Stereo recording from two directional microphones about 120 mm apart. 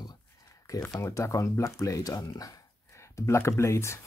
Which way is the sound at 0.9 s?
25° left (ahead or behind).